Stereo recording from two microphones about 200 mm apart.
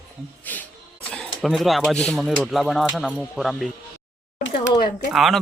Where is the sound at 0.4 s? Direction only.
10° left (ahead or behind).